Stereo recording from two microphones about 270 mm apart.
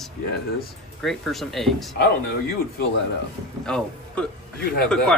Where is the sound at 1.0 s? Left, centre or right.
Centre.